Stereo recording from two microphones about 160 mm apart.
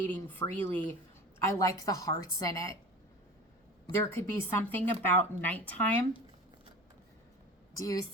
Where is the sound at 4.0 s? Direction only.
15° left (ahead or behind).